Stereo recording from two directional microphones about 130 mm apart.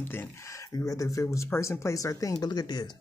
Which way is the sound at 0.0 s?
15° left (ahead or behind).